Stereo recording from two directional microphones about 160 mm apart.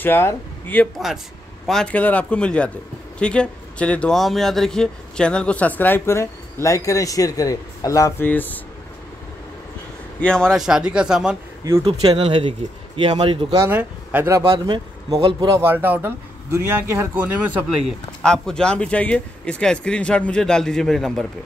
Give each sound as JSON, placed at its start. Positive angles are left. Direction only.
{"t": 0.0, "sound": "speech", "side_deg": 15}
{"t": 0.9, "sound": "speech", "side_deg": 0}
{"t": 10.2, "sound": "speech", "side_deg": 5}
{"t": 11.8, "sound": "speech", "side_deg": -35}
{"t": 13.5, "sound": "speech", "side_deg": -15}
{"t": 14.4, "sound": "speech", "side_deg": -30}
{"t": 15.6, "sound": "speech", "side_deg": -10}
{"t": 18.2, "sound": "speech", "side_deg": 5}